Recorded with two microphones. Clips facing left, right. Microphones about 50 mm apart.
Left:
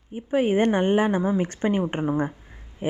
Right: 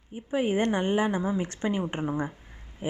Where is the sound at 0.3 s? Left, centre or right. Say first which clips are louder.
Left 5 dB; left.